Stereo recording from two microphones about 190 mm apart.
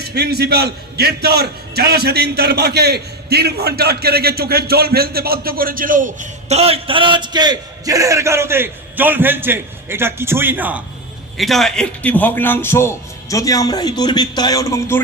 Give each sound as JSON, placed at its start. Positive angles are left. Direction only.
{"t": 0.1, "sound": "a man's voice", "side_deg": -60}